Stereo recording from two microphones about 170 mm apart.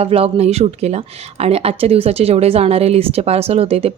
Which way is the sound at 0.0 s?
35° right (ahead or behind).